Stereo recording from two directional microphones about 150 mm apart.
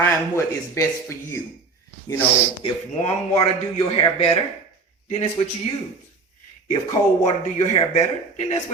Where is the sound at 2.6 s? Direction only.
45° left (ahead or behind).